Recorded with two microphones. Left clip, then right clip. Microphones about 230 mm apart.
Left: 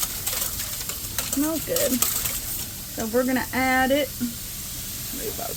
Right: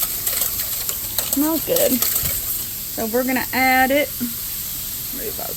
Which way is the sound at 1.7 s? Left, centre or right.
Right.